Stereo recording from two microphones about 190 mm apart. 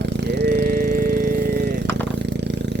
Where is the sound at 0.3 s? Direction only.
65° right (ahead or behind).